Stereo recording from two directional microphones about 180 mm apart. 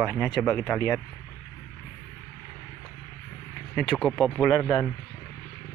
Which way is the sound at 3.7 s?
Centre (ahead or behind).